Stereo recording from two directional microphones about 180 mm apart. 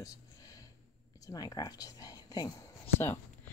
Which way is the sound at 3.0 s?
10° left (ahead or behind).